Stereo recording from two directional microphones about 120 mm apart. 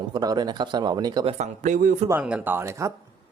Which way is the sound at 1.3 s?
80° right.